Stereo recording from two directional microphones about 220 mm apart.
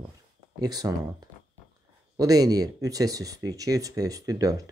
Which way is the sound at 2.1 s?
15° right (ahead or behind).